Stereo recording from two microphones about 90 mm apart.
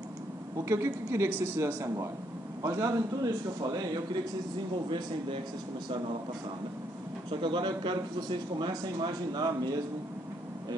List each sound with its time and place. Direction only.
0.7 s a woman's voice: 30° right (ahead or behind)
4.8 s speech: 60° right (ahead or behind)
7.2 s speech: 60° right (ahead or behind)